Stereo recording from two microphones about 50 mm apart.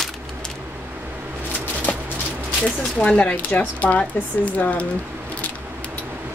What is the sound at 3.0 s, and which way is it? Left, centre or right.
Speech, left.